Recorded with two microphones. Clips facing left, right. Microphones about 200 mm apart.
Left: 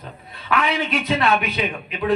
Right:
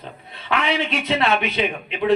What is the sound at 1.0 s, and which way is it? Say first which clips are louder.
A man's voice: even; 25° right (ahead or behind).